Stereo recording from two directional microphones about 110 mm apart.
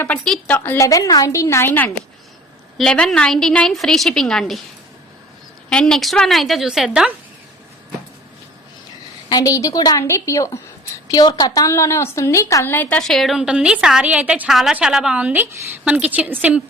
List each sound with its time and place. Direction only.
0.5 s a woman's voice: 20° left (ahead or behind)
0.9 s a woman's voice: 30° left (ahead or behind)
2.7 s a woman's voice: 10° left (ahead or behind)
5.6 s a woman's voice: 5° left (ahead or behind)
9.3 s a woman's voice: 30° left (ahead or behind)
11.1 s a woman's voice: 40° left (ahead or behind)
12.7 s a woman's voice: 15° left (ahead or behind)
13.0 s a woman's voice: 5° left (ahead or behind); by 16.6 s 15° right (ahead or behind)